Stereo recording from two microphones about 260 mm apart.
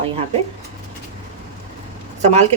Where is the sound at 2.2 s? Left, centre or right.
Right.